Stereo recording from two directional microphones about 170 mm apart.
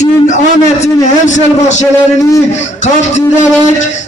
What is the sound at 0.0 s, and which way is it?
A man's voice, 45° left (ahead or behind).